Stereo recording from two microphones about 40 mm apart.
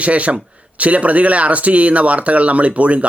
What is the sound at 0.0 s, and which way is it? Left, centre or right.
Speech, right.